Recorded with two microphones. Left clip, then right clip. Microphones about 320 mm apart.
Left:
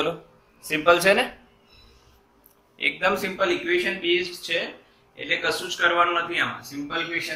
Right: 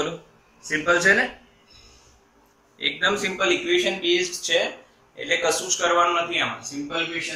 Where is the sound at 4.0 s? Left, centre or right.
Centre.